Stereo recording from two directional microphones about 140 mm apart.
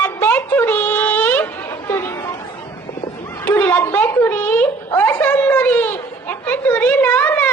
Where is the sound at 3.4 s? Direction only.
10° left (ahead or behind).